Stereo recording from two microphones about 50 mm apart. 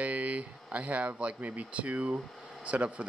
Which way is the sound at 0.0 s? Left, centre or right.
Right.